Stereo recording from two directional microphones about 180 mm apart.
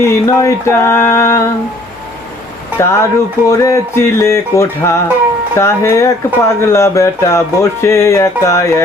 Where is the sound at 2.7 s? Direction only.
15° left (ahead or behind).